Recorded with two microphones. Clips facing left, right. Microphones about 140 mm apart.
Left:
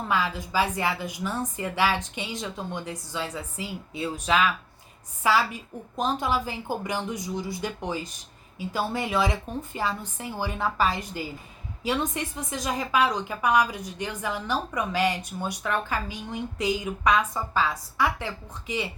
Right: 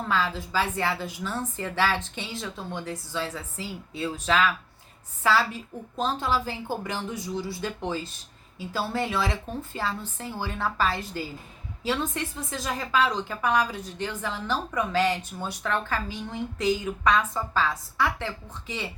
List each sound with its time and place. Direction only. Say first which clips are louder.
0.1 s a woman's voice: even; 15° left (ahead or behind)